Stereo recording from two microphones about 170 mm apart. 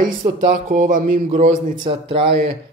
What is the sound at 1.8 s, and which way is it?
Speech, 30° right (ahead or behind).